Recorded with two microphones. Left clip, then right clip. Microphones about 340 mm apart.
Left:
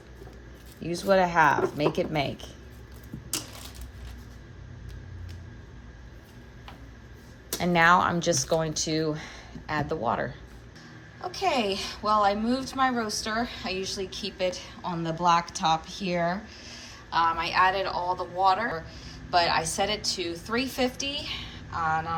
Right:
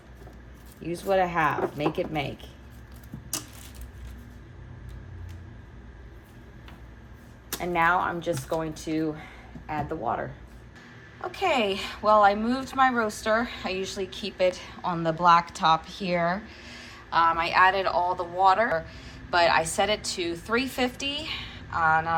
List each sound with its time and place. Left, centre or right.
0.8 s speech: left
7.6 s speech: left
11.2 s speech: centre